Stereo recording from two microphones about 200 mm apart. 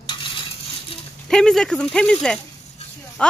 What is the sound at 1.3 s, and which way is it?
Speech, 5° left (ahead or behind).